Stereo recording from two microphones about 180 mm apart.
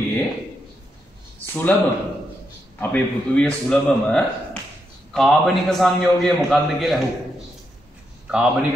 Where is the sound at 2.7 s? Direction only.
10° left (ahead or behind).